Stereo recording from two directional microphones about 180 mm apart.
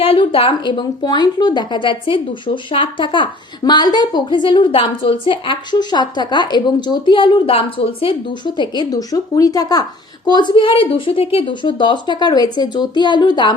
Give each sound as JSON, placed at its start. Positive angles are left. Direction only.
{"t": 0.0, "sound": "a woman's voice", "side_deg": 30}